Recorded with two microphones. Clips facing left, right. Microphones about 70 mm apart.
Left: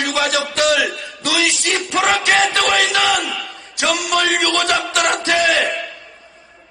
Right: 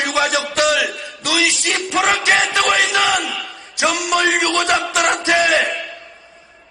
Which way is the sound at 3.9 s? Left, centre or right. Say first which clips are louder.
Even; centre.